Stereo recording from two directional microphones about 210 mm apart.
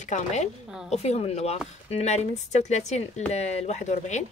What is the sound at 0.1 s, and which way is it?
Speech, 35° left (ahead or behind).